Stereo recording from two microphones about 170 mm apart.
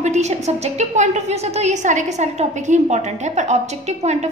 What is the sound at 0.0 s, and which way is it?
A woman's voice, 40° right (ahead or behind).